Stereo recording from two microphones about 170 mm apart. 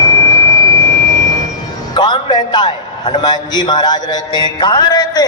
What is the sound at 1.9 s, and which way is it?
A man's voice, 25° left (ahead or behind).